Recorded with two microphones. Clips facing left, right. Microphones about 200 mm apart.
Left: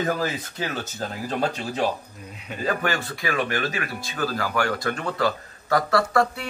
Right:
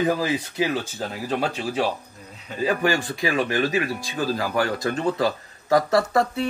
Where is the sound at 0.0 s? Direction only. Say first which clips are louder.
Right 3 dB; 10° right (ahead or behind).